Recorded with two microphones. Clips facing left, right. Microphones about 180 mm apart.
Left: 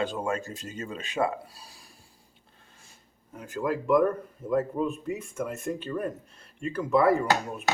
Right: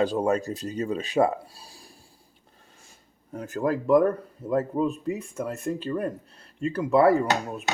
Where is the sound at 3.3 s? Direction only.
40° right (ahead or behind).